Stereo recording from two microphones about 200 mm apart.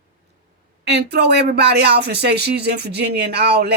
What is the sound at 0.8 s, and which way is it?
Speech, 55° right (ahead or behind).